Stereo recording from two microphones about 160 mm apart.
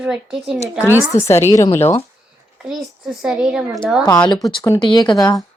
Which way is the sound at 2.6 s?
Centre (ahead or behind).